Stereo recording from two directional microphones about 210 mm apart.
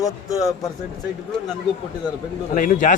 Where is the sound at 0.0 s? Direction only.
15° left (ahead or behind).